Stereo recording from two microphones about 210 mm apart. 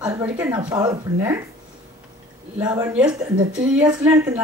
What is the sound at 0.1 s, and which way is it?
Speech, 10° right (ahead or behind).